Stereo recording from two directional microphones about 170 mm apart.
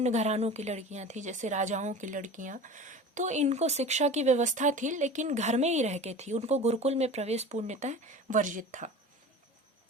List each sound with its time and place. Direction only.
0.0 s a woman's voice: 40° right (ahead or behind)